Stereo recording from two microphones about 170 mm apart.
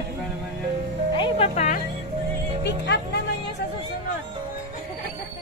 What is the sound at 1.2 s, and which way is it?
Music, 40° left (ahead or behind).